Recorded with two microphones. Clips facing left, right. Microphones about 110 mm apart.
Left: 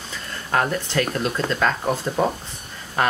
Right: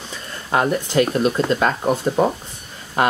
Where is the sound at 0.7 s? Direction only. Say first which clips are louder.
Right 5 dB; 20° right (ahead or behind).